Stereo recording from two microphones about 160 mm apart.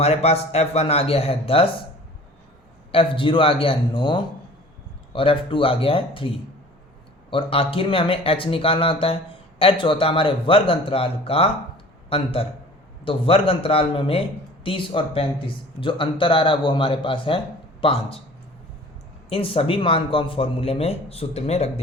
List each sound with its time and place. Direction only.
0.0 s a man's voice: 40° left (ahead or behind)
2.9 s a man's voice: 35° left (ahead or behind)
19.3 s a man's voice: 35° left (ahead or behind)